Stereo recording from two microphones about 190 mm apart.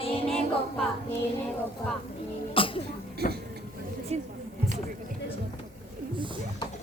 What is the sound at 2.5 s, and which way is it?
Cough, 30° left (ahead or behind).